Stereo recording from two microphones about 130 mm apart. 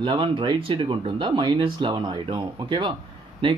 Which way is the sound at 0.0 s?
40° right (ahead or behind).